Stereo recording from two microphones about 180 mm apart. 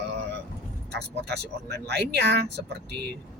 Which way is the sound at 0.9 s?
65° right (ahead or behind).